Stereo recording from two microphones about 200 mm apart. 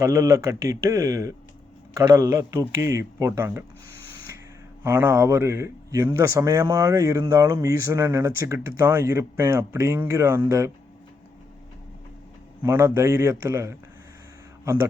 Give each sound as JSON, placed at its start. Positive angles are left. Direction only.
{"t": 0.0, "sound": "speech", "side_deg": -15}
{"t": 4.8, "sound": "speech", "side_deg": -10}
{"t": 12.6, "sound": "speech", "side_deg": -10}